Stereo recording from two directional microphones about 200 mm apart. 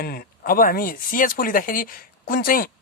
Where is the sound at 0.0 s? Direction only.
50° left (ahead or behind).